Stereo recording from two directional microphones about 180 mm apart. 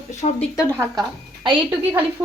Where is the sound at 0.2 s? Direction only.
40° left (ahead or behind).